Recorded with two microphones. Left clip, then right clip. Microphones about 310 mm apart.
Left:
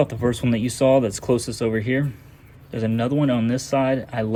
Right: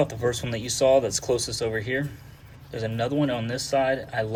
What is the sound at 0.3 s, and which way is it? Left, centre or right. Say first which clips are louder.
Speech: left 4 dB; left.